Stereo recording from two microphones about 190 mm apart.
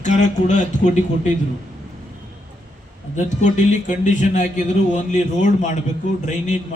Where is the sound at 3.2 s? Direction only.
40° left (ahead or behind).